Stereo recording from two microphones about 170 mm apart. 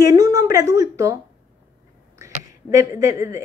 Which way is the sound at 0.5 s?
20° right (ahead or behind).